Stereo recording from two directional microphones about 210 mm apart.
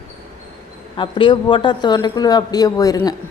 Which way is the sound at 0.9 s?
25° left (ahead or behind).